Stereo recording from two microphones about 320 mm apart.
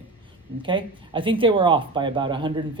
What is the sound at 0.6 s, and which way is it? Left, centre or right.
A woman's voice, centre.